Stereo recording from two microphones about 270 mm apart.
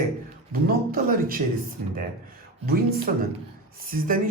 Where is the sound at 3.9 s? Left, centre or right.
Right.